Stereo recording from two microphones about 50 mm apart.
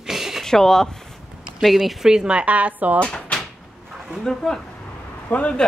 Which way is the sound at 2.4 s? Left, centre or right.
Right.